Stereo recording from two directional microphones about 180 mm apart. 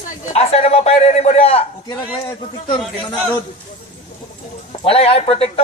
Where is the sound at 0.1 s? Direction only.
35° left (ahead or behind).